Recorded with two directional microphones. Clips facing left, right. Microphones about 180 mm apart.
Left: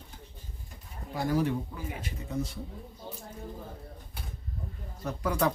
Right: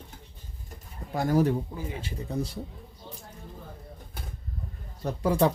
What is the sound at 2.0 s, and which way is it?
Speech, 35° right (ahead or behind).